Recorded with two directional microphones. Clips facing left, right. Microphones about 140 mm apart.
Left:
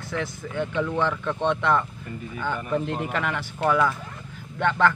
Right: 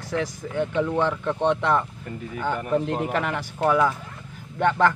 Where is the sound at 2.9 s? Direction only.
40° right (ahead or behind).